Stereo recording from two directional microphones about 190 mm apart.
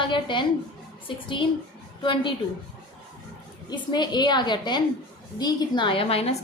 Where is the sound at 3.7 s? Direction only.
20° left (ahead or behind).